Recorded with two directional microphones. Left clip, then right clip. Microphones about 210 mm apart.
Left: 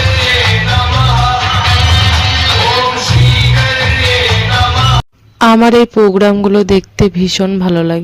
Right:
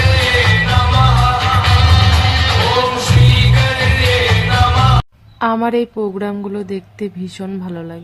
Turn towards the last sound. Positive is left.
turn(degrees=35)  # may be behind; listen again after turning